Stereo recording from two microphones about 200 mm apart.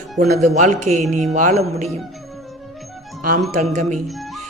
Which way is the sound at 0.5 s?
35° right (ahead or behind).